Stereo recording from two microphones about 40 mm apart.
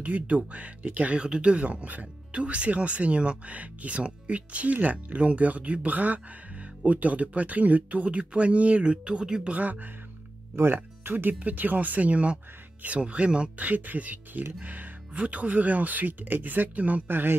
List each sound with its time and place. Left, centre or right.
0.0 s speech: right
9.5 s speech: right
10.6 s speech: right
11.3 s speech: right
13.6 s speech: right
15.1 s speech: right
17.1 s a man's voice: right